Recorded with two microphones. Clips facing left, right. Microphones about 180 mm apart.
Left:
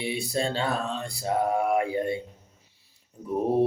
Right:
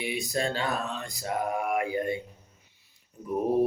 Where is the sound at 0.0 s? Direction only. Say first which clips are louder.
Left 2 dB; 30° left (ahead or behind).